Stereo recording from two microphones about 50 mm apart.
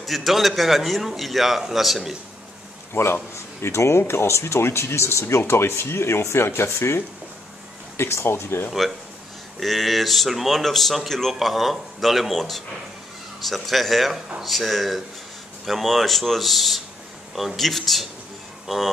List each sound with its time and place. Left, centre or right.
0.0 s a man's voice: centre
2.9 s speech: left
3.6 s speech: left
8.0 s speech: left
9.6 s a man's voice: centre
11.3 s a man's voice: centre
18.7 s speech: centre